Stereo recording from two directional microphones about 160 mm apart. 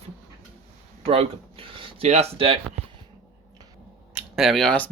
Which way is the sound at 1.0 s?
35° right (ahead or behind).